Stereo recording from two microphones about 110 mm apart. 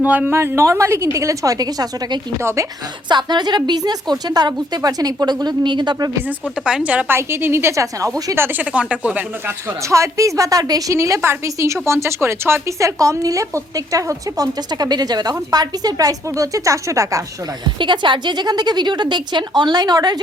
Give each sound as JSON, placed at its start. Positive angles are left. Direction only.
{"t": 0.0, "sound": "a woman's voice", "side_deg": -15}
{"t": 2.4, "sound": "a woman's voice", "side_deg": -25}
{"t": 3.1, "sound": "a woman's voice", "side_deg": -40}
{"t": 6.2, "sound": "speech", "side_deg": -10}
{"t": 7.2, "sound": "a woman's voice", "side_deg": -25}
{"t": 8.4, "sound": "speech", "side_deg": -15}
{"t": 9.9, "sound": "a woman's voice", "side_deg": -30}
{"t": 17.7, "sound": "a woman's voice", "side_deg": -45}